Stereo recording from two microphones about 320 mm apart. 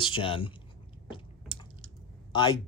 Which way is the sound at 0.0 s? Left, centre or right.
Centre.